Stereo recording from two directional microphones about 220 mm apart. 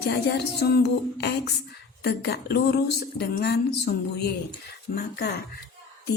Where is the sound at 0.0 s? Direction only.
50° left (ahead or behind).